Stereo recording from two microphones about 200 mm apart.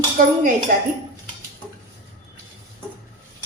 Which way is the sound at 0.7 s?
40° right (ahead or behind).